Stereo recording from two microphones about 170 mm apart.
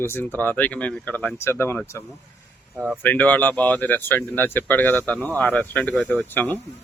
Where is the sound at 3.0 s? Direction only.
10° left (ahead or behind).